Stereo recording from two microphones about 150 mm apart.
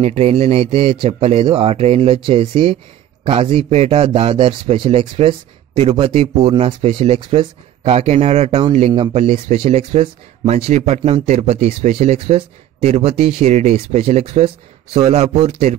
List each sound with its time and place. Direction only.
0.0 s a man's voice: 40° right (ahead or behind)